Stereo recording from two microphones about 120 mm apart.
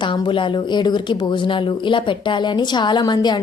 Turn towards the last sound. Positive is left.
turn(degrees=35)  # may be behind; listen again after turning